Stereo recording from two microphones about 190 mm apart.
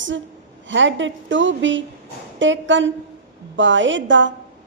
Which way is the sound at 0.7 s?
75° right (ahead or behind).